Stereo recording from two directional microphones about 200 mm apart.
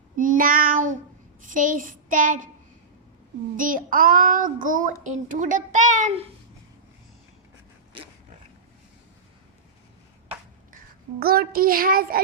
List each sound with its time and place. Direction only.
0.2 s child singing: 45° right (ahead or behind)
1.4 s a child's voice: 40° right (ahead or behind)
3.6 s a child's voice: 45° right (ahead or behind)
11.2 s child singing: 50° right (ahead or behind)